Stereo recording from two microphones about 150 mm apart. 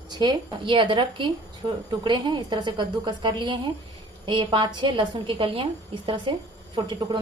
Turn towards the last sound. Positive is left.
turn(degrees=-30)  # may be behind; listen again after turning